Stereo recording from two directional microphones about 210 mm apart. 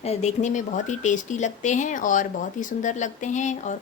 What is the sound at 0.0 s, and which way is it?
A woman's voice, 30° left (ahead or behind).